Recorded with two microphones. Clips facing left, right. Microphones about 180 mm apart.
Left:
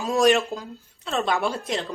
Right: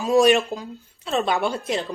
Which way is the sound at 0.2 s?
Centre (ahead or behind).